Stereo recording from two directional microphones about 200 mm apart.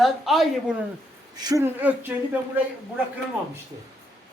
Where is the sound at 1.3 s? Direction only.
20° right (ahead or behind).